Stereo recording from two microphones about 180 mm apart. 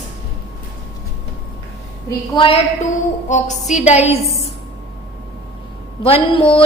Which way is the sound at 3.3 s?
40° left (ahead or behind).